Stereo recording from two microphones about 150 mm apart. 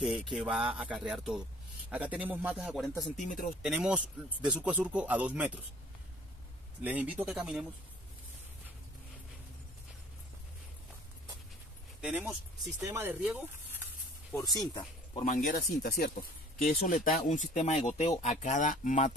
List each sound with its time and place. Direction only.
0.0 s speech: centre (ahead or behind)
2.9 s speech: 15° left (ahead or behind)
3.2 s speech: 60° left (ahead or behind)
3.6 s speech: 5° right (ahead or behind)
6.8 s speech: 10° right (ahead or behind)
12.0 s speech: 5° right (ahead or behind)
12.8 s speech: 15° right (ahead or behind)
14.3 s speech: 25° left (ahead or behind)
15.2 s speech: 75° left (ahead or behind)
17.3 s speech: 55° left (ahead or behind)